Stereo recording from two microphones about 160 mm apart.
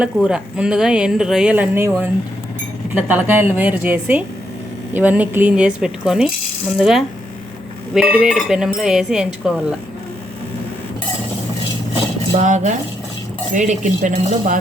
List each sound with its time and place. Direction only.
0.0 s a woman's voice: 5° right (ahead or behind)
12.3 s speech: 50° right (ahead or behind)